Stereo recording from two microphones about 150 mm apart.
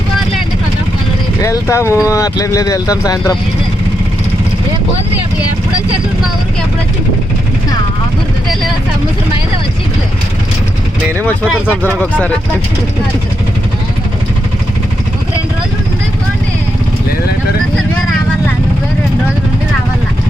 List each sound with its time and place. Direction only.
1.4 s speech: 20° left (ahead or behind)